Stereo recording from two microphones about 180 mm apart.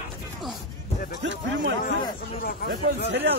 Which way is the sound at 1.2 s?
80° right.